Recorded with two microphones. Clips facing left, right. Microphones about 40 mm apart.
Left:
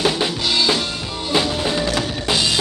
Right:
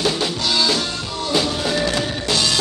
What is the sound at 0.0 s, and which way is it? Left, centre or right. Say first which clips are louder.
Music: left 1 dB; centre.